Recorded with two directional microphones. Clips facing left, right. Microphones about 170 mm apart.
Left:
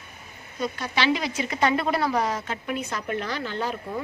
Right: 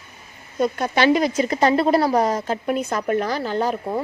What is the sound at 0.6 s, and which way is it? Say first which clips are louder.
A woman's voice: right 8 dB; 50° right (ahead or behind).